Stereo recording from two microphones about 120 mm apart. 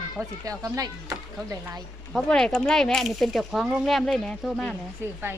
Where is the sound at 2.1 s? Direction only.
5° left (ahead or behind).